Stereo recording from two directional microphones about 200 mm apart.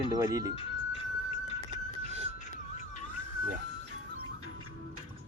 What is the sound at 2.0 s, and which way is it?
Music, 30° right (ahead or behind).